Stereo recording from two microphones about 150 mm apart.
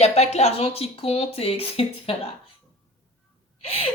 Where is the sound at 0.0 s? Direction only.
45° left (ahead or behind).